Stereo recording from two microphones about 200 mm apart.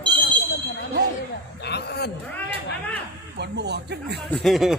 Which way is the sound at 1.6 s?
55° left (ahead or behind).